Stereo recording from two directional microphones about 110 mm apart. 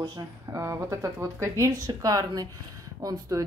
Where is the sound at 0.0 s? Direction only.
25° right (ahead or behind).